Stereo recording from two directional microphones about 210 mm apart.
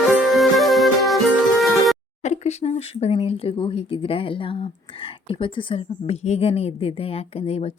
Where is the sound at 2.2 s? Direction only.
30° left (ahead or behind).